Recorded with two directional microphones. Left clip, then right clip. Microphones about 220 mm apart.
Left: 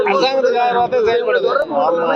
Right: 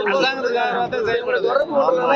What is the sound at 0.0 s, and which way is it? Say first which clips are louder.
A man's voice: left 5 dB; 50° left (ahead or behind).